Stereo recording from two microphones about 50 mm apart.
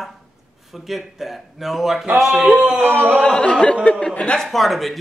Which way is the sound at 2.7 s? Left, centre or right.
Right.